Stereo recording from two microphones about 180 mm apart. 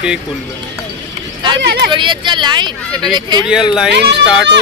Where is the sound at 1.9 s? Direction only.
25° right (ahead or behind).